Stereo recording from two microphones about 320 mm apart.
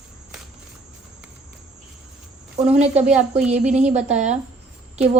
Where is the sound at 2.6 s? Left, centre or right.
Centre.